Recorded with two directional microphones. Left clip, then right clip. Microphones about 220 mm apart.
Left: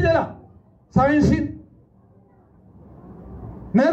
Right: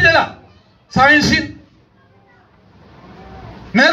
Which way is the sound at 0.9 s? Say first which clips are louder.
Right 7 dB; 50° left (ahead or behind).